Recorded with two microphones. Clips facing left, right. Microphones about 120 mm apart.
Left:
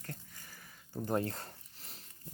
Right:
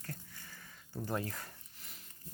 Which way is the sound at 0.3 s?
15° left (ahead or behind).